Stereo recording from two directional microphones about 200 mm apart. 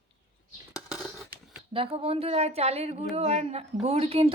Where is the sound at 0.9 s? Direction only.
5° right (ahead or behind).